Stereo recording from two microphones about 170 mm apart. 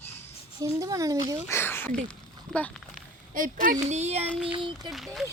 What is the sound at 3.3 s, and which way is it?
Speech, 55° right (ahead or behind).